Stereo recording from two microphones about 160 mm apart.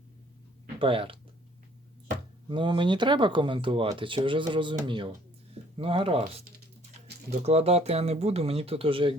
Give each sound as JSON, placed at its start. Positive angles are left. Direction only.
{"t": 0.8, "sound": "speech", "side_deg": -35}
{"t": 2.5, "sound": "speech", "side_deg": -30}
{"t": 7.3, "sound": "speech", "side_deg": -40}